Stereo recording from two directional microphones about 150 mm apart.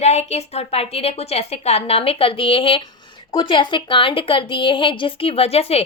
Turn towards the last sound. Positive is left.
turn(degrees=40)  # may be behind; listen again after turning